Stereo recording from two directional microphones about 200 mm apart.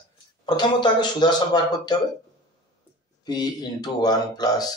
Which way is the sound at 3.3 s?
20° left (ahead or behind).